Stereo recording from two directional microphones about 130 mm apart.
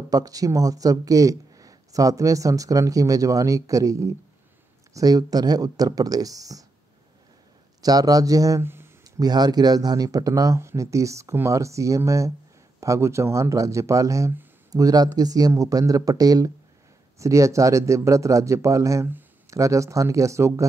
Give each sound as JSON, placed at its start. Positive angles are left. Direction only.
{"t": 0.1, "sound": "speech", "side_deg": -25}
{"t": 7.8, "sound": "speech", "side_deg": -30}
{"t": 9.0, "sound": "speech", "side_deg": -30}